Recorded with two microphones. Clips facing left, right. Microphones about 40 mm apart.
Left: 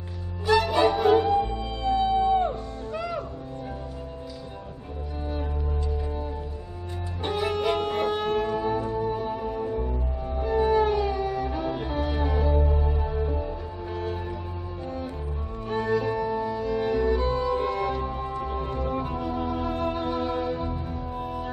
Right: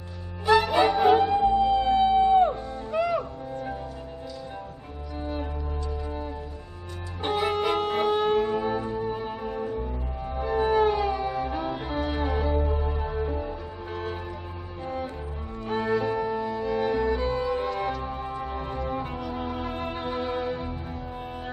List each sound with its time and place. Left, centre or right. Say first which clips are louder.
0.5 s music: right 1 dB; centre
1.8 s music: right 3 dB; right
7.2 s music: right 1 dB; right
15.7 s music: even; centre